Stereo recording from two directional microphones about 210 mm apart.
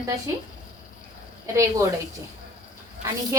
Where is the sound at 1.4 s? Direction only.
15° right (ahead or behind).